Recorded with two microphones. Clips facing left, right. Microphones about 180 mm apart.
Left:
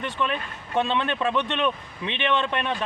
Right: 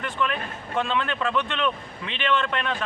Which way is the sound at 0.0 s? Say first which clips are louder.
Even; 20° left (ahead or behind).